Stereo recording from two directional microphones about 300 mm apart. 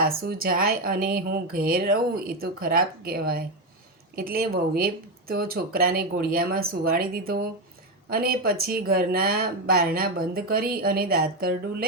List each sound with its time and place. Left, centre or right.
0.0 s speech: right